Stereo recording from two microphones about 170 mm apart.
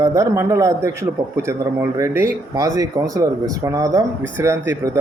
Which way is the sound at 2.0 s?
20° right (ahead or behind).